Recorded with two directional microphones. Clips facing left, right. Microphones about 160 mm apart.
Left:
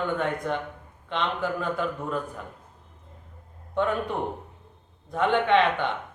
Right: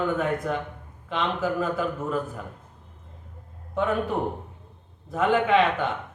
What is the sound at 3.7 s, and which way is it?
A man's voice, 5° right (ahead or behind).